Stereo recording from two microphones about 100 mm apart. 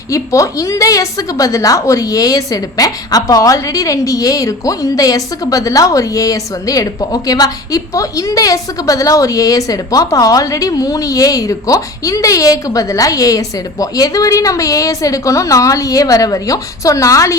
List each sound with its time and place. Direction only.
0.1 s a woman's voice: 30° left (ahead or behind)